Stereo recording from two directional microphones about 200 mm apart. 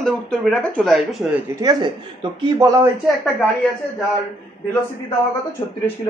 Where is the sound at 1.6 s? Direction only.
20° right (ahead or behind).